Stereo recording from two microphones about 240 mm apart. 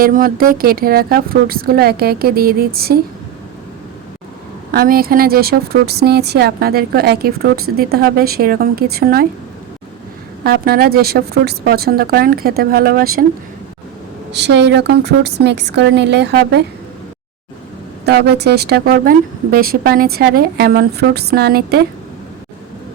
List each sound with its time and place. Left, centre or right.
0.0 s speech: right
4.7 s speech: right
10.4 s speech: right
14.3 s a woman's voice: right
18.0 s speech: right